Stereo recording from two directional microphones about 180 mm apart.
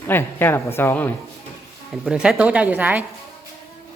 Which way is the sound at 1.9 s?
5° right (ahead or behind).